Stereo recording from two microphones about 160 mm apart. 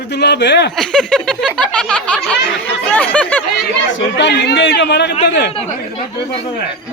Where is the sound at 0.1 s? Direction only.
90° left.